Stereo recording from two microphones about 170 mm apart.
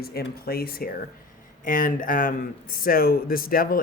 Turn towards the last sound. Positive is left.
turn(degrees=60)  # may be behind; listen again after turning